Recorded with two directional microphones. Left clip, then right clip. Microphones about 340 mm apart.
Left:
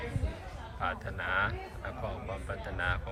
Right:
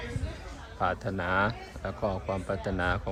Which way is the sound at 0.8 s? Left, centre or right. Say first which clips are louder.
Right 5 dB; centre.